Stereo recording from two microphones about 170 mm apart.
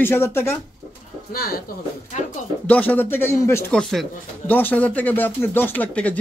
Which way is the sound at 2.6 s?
10° left (ahead or behind).